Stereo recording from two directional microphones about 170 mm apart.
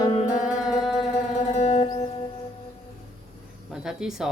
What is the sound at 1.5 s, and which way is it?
Music, 40° left (ahead or behind).